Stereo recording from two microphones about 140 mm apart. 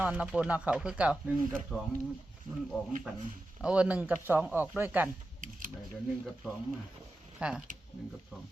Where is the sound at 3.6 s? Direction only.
10° right (ahead or behind).